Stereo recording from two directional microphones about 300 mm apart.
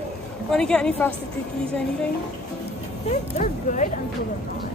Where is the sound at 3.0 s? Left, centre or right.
Left.